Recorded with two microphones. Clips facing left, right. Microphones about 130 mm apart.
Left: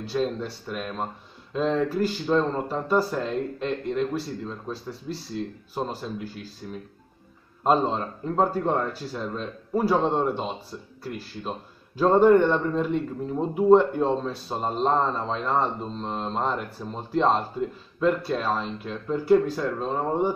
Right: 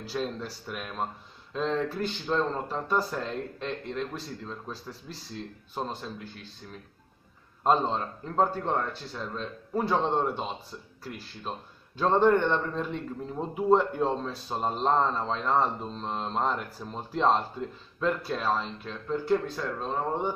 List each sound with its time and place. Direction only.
0.0 s a man's voice: centre (ahead or behind)
7.6 s a man's voice: 5° left (ahead or behind)